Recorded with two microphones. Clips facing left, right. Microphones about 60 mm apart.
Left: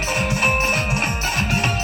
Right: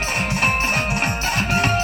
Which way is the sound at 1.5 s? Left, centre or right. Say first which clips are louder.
Right 5 dB; right.